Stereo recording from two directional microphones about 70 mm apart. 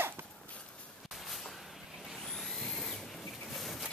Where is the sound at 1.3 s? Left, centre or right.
Centre.